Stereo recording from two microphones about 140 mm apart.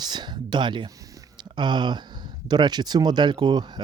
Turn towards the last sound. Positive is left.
turn(degrees=-30)  # may be behind; listen again after turning